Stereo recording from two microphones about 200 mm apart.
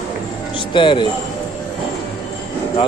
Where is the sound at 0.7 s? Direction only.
25° left (ahead or behind).